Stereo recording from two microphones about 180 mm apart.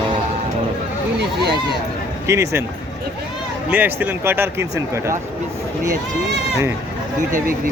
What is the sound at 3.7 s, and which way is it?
Speech, 10° right (ahead or behind).